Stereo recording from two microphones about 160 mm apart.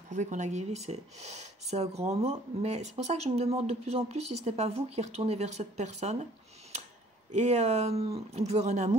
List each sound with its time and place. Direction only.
0.1 s speech: 50° right (ahead or behind)
7.3 s speech: 45° right (ahead or behind)